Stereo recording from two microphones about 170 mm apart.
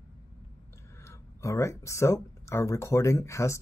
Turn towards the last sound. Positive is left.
turn(degrees=15)  # may be behind; listen again after turning